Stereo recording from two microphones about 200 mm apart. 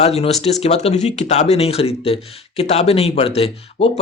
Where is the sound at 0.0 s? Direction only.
30° left (ahead or behind).